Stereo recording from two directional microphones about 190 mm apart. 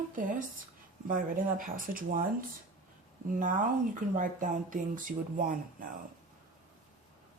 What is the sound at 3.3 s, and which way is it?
Speech, 45° right (ahead or behind).